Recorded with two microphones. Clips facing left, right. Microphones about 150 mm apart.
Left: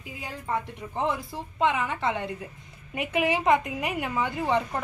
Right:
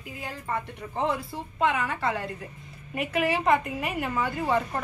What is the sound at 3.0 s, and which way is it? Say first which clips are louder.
A woman's voice: even; 15° left (ahead or behind).